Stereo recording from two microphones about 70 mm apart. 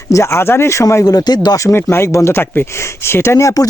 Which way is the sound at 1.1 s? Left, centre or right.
Left.